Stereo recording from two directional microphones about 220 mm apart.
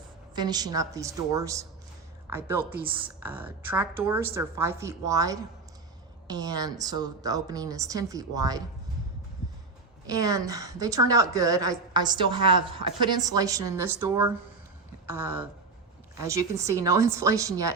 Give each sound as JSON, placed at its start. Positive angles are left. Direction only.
{"t": 0.3, "sound": "a woman's voice", "side_deg": -20}
{"t": 10.1, "sound": "a woman's voice", "side_deg": -15}